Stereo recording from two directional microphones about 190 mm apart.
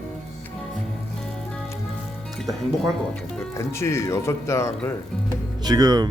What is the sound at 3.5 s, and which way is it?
Speech, 15° left (ahead or behind).